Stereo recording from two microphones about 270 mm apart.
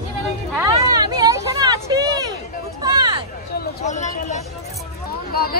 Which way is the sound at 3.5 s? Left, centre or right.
Left.